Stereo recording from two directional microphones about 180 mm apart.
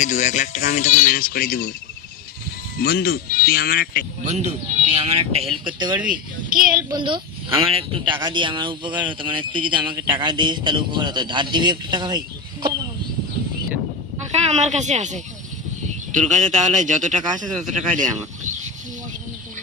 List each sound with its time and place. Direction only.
0.0 s speech: 40° left (ahead or behind)
2.8 s speech: 55° left (ahead or behind)
4.3 s a man's voice: 40° right (ahead or behind)
6.1 s speech: 50° right (ahead or behind)
6.9 s a man's voice: 25° right (ahead or behind)
8.9 s speech: 10° right (ahead or behind)
9.2 s a man's voice: 25° right (ahead or behind)
14.3 s speech: 40° right (ahead or behind)
16.3 s speech: 45° right (ahead or behind)